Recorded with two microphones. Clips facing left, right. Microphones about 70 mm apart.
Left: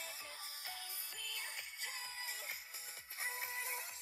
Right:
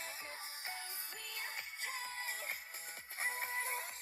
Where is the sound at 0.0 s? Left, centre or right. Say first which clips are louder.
Right 4 dB; right.